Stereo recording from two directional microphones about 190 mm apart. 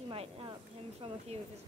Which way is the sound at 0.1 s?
30° right (ahead or behind).